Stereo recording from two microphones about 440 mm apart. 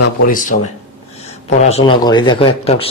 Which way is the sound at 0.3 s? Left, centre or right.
Centre.